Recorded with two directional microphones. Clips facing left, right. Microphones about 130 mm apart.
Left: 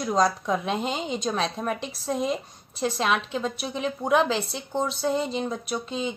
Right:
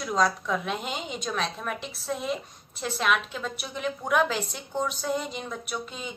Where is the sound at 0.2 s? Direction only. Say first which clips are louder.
Left 1 dB; 30° left (ahead or behind).